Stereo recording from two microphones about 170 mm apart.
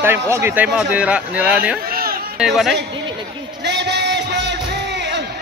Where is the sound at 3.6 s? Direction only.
90° right.